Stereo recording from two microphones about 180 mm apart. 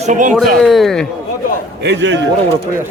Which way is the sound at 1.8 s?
75° right (ahead or behind).